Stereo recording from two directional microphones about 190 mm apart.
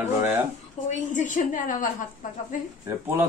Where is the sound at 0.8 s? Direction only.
40° left (ahead or behind).